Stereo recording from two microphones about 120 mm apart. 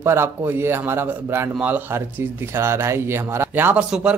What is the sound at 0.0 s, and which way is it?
A man's voice, 20° right (ahead or behind).